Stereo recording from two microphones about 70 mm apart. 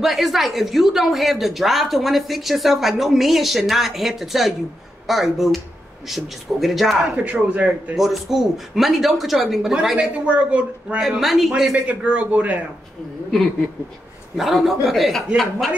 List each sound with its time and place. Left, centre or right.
0.0 s speech: centre
7.2 s speech: centre
8.0 s speech: centre
11.0 s speech: centre
11.7 s speech: centre
14.3 s speech: centre